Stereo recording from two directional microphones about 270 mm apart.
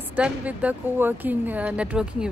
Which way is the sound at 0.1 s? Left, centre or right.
Centre.